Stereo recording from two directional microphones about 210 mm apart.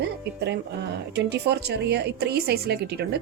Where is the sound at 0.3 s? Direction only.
55° right (ahead or behind).